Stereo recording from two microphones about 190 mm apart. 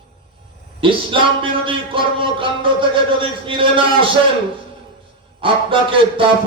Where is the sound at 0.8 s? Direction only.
25° right (ahead or behind).